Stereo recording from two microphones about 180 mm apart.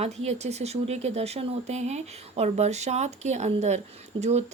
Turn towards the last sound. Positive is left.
turn(degrees=-30)  # may be behind; listen again after turning